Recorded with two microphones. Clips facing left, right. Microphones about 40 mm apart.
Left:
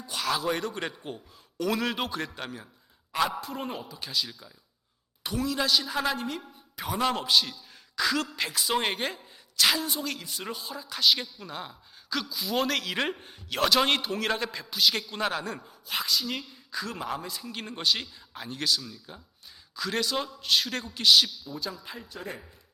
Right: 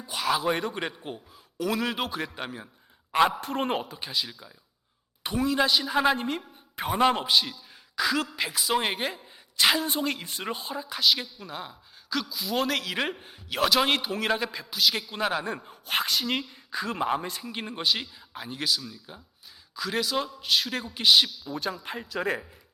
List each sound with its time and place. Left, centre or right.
0.0 s a man's voice: centre
3.1 s a man's voice: right
3.9 s a man's voice: centre
9.6 s a woman's voice: right
10.9 s a woman's voice: centre
15.6 s speech: right
16.7 s a woman's voice: right
17.4 s a man's voice: centre
21.5 s a man's voice: right